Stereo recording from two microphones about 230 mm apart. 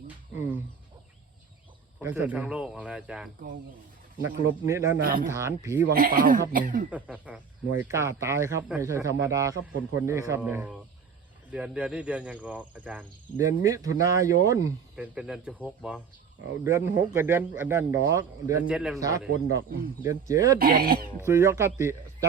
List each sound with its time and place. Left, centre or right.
0.3 s a sound: centre
2.0 s speech: centre
4.6 s speech: centre
5.0 s speech: right
5.3 s speech: centre
5.9 s speech: right
6.9 s speech: centre
18.9 s speech: centre
20.6 s speech: right
21.2 s speech: centre